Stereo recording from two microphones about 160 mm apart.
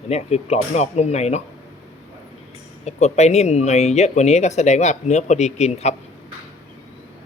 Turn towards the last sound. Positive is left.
turn(degrees=45)  # may be behind; listen again after turning